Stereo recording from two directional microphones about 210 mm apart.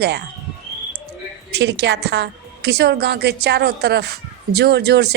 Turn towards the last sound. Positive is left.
turn(degrees=-50)  # may be behind; listen again after turning